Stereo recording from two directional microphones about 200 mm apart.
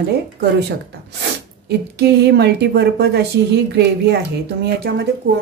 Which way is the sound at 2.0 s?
55° right (ahead or behind).